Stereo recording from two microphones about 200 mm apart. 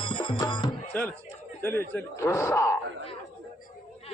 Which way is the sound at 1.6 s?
10° left (ahead or behind).